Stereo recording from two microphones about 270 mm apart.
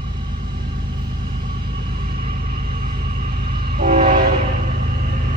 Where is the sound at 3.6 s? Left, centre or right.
Right.